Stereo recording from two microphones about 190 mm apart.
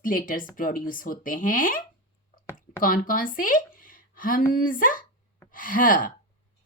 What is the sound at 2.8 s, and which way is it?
A woman's voice, 45° left (ahead or behind).